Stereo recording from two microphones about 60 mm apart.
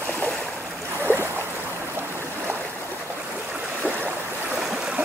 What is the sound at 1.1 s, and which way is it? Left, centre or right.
Boat, left.